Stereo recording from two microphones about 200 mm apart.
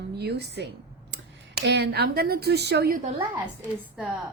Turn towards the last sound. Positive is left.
turn(degrees=-5)  # may be behind; listen again after turning